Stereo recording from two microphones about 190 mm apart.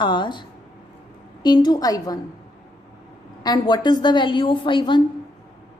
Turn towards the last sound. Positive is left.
turn(degrees=25)  # may be behind; listen again after turning